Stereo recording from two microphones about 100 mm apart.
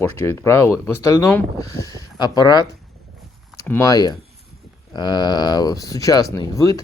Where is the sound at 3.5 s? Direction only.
30° left (ahead or behind).